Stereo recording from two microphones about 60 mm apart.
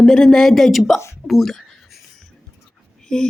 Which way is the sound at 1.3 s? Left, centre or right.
Centre.